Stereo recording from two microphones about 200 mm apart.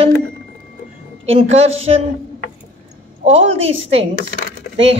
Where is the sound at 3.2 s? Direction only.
30° right (ahead or behind).